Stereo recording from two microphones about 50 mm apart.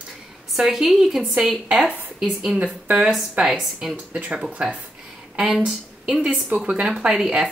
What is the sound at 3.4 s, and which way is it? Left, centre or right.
Speech, centre.